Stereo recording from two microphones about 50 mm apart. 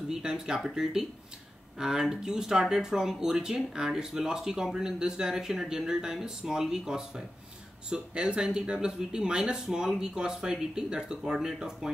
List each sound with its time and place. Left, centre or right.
0.1 s speech: centre